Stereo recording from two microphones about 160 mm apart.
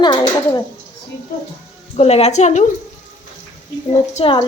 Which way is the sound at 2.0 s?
40° left (ahead or behind).